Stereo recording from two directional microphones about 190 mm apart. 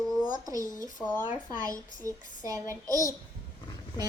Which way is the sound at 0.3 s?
20° right (ahead or behind).